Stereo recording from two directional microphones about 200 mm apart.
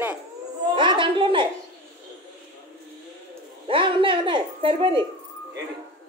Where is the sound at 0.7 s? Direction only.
25° right (ahead or behind).